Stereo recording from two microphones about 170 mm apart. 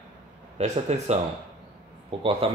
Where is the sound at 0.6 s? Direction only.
40° right (ahead or behind).